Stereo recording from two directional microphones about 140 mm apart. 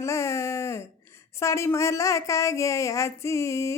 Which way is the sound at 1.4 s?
20° left (ahead or behind).